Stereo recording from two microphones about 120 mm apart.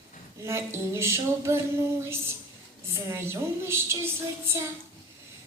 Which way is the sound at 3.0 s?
20° right (ahead or behind).